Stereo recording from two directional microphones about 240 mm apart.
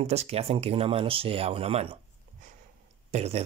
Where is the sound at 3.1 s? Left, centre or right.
Right.